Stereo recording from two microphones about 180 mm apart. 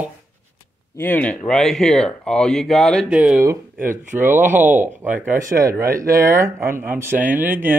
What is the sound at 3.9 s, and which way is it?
Speech, 45° right (ahead or behind).